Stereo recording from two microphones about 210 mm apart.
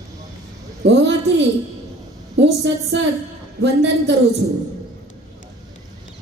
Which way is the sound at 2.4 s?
55° right (ahead or behind).